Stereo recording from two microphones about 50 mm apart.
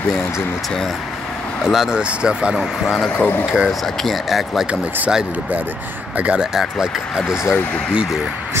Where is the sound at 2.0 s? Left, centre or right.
Centre.